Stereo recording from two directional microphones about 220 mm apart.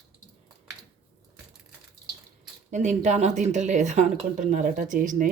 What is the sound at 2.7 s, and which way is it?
Speech, 35° right (ahead or behind).